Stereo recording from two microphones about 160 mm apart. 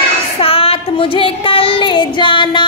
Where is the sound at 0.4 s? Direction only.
35° left (ahead or behind).